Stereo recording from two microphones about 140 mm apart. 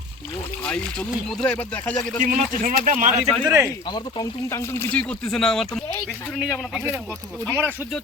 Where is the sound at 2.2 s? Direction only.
75° right (ahead or behind).